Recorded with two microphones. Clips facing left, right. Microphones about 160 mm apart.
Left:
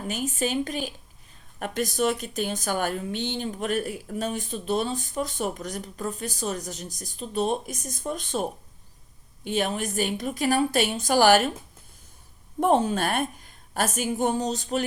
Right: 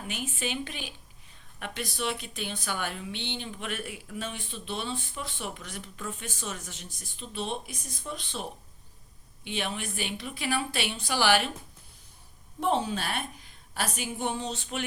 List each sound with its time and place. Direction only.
0.0 s a woman's voice: 40° left (ahead or behind)
12.5 s speech: 50° left (ahead or behind)